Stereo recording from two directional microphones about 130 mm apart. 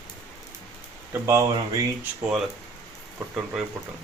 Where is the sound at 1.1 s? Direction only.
25° right (ahead or behind).